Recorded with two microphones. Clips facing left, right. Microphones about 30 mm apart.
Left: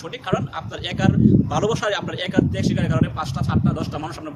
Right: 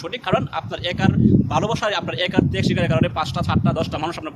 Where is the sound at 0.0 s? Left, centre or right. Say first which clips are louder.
Right 3 dB; right.